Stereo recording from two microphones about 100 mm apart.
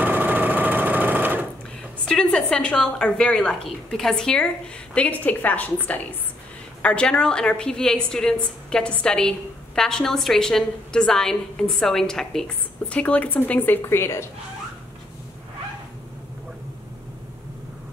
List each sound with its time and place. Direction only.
0.0 s sewing machine: 15° right (ahead or behind)
2.0 s a woman's voice: 10° left (ahead or behind)
12.8 s a woman's voice: 15° left (ahead or behind)